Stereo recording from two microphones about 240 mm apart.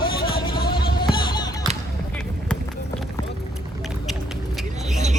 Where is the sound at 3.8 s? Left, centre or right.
Centre.